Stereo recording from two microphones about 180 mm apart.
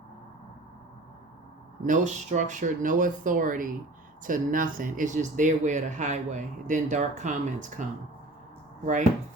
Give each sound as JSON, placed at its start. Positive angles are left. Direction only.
{"t": 1.8, "sound": "speech", "side_deg": -45}